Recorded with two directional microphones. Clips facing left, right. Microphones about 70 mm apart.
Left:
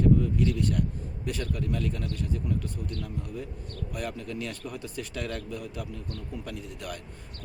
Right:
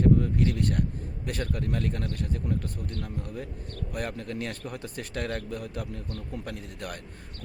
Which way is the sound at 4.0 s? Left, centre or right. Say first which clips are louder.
Right 1 dB; right.